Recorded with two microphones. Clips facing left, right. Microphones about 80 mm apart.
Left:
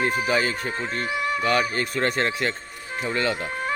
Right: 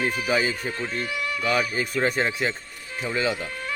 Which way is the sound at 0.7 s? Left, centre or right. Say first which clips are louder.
Left 2 dB; left.